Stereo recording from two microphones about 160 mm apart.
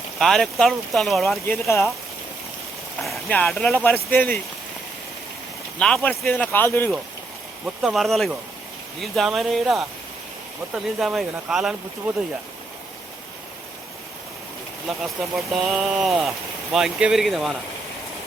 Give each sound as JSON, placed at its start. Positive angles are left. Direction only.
{"t": 0.2, "sound": "speech", "side_deg": 0}
{"t": 1.5, "sound": "speech", "side_deg": 15}
{"t": 3.0, "sound": "speech", "side_deg": 5}
{"t": 5.8, "sound": "speech", "side_deg": 5}
{"t": 7.8, "sound": "speech", "side_deg": 0}
{"t": 11.0, "sound": "speech", "side_deg": 0}
{"t": 14.8, "sound": "speech", "side_deg": 0}